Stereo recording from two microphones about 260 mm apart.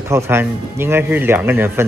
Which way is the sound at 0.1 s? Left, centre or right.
Centre.